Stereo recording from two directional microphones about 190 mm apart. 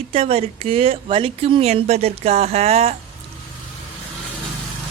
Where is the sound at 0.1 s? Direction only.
30° right (ahead or behind).